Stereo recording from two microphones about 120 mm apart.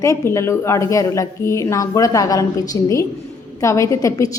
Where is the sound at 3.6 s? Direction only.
25° left (ahead or behind).